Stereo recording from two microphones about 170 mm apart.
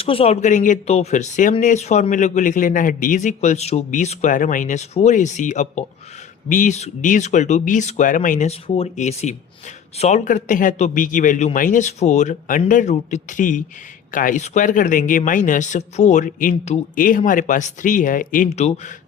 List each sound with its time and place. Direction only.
0.0 s speech: 35° left (ahead or behind)